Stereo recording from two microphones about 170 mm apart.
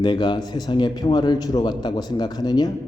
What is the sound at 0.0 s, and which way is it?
A man's voice, 25° left (ahead or behind).